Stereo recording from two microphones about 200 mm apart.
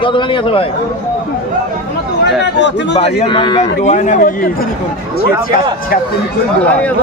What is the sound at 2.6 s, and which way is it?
Speech, 60° left (ahead or behind).